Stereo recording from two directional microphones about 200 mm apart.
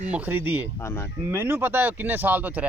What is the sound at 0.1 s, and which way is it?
Speech, 10° right (ahead or behind).